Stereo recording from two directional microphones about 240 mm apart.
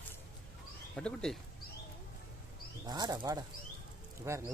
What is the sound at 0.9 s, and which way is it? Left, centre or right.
Speech, centre.